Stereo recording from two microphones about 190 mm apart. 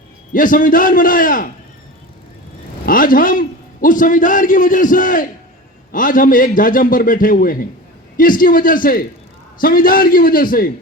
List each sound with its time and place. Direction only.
0.3 s a man's voice: 45° left (ahead or behind)
2.8 s a man's voice: 50° left (ahead or behind)